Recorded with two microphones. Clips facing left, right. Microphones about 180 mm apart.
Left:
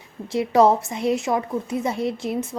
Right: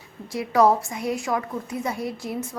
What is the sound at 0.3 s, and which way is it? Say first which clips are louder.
A woman's voice: left 2 dB; 25° left (ahead or behind).